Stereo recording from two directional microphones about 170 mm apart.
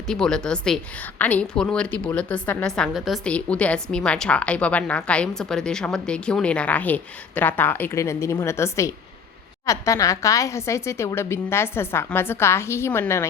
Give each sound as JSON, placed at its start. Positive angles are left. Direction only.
{"t": 0.1, "sound": "a woman's voice", "side_deg": 5}